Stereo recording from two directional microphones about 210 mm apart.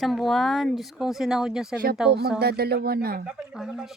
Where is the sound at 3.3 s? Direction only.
5° right (ahead or behind).